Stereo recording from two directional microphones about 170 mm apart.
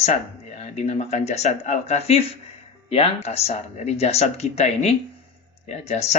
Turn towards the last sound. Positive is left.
turn(degrees=40)  # may be behind; listen again after turning